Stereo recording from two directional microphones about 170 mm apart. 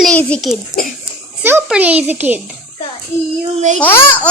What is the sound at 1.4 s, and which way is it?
A child's voice, 10° right (ahead or behind).